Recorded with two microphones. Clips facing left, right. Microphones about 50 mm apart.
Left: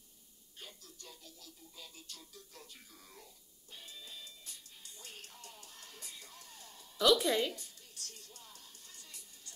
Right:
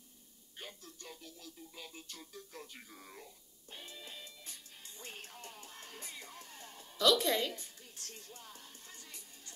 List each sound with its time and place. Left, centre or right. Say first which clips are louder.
0.6 s music: right 4 dB; right
7.0 s music: left 1 dB; centre
7.5 s music: right 2 dB; right